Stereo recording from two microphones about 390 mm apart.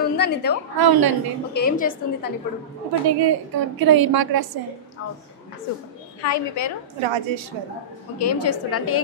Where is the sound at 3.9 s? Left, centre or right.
Right.